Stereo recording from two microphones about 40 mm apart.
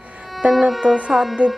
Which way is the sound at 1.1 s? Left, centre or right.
Centre.